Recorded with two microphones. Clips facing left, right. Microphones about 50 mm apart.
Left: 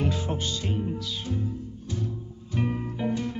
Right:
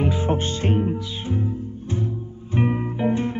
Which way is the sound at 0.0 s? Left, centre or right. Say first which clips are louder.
Right 5 dB; right.